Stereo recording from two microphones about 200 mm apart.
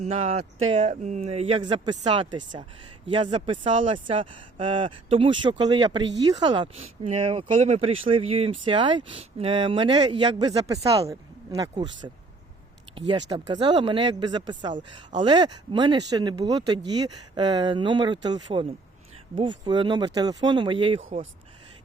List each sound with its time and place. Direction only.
0.0 s speech: 35° right (ahead or behind)